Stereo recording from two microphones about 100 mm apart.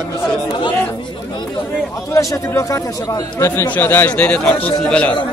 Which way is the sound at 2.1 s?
30° left (ahead or behind).